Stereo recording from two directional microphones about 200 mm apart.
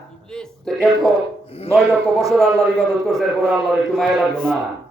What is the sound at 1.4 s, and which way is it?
Speech, 30° left (ahead or behind).